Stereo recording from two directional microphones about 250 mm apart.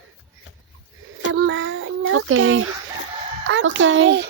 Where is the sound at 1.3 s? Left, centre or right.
Right.